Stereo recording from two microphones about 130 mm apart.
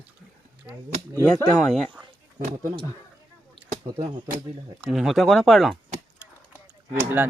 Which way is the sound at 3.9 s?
45° right (ahead or behind).